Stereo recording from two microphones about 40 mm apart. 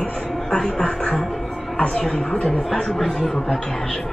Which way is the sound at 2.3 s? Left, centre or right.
Left.